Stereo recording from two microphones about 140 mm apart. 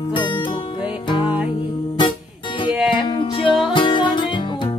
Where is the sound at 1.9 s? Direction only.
35° left (ahead or behind).